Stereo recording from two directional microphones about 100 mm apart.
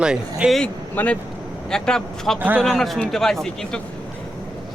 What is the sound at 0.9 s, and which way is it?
Speech, 15° left (ahead or behind).